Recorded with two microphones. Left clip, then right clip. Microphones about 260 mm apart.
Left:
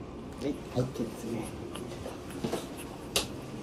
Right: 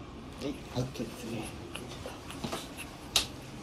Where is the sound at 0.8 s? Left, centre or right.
Centre.